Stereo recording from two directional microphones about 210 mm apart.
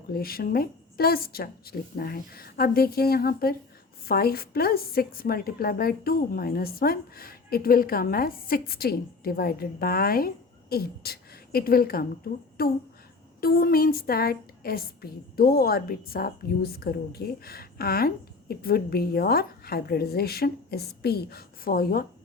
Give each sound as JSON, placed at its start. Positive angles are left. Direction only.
{"t": 0.1, "sound": "a woman's voice", "side_deg": 45}